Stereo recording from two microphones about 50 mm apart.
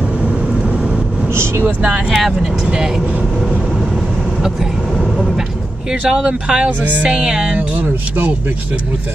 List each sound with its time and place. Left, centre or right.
2.0 s speech: centre
6.0 s speech: centre
6.8 s music: right
7.1 s music: centre
7.5 s speech: right